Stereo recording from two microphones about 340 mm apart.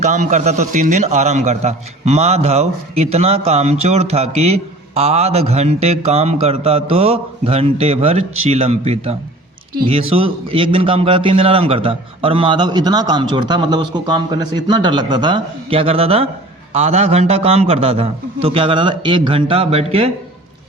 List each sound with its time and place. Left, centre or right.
0.0 s a man's voice: right